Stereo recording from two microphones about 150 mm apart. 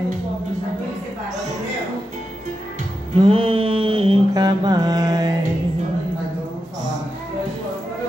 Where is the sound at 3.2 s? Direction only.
40° right (ahead or behind).